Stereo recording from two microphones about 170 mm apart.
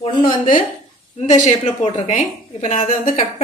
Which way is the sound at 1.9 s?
35° left (ahead or behind).